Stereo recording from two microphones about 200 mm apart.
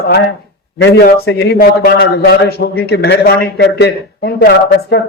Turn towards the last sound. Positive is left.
turn(degrees=55)  # may be behind; listen again after turning